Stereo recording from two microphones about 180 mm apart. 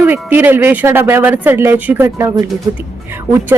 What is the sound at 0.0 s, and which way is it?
Speech, 10° right (ahead or behind).